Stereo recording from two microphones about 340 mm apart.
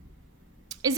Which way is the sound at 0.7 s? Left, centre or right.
Centre.